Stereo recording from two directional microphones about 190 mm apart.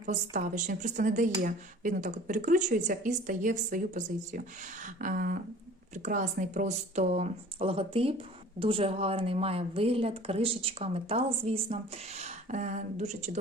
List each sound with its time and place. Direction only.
0.0 s a woman's voice: 40° right (ahead or behind)